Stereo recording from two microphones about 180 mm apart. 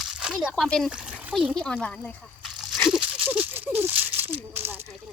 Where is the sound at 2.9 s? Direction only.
10° right (ahead or behind).